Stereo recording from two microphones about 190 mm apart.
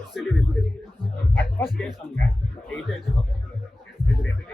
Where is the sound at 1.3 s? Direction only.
10° left (ahead or behind).